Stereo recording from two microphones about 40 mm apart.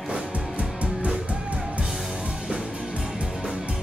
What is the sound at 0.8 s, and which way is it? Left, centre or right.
Music, right.